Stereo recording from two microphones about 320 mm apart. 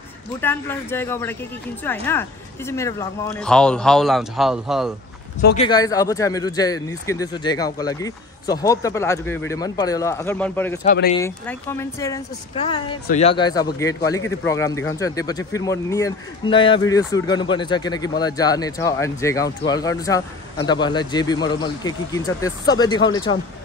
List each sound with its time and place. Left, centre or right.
0.4 s a man's voice: centre
5.6 s a man's voice: centre
10.8 s speech: left
11.1 s a man's voice: centre